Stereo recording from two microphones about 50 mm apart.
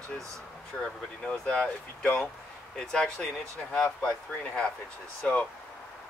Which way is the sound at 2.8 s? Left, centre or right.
Centre.